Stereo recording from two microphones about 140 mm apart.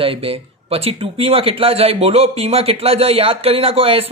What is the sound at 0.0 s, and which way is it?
Speech, 40° right (ahead or behind).